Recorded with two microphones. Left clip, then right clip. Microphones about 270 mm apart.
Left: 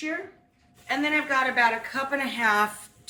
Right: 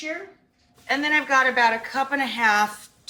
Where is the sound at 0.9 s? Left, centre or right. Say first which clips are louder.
Right 4 dB; right.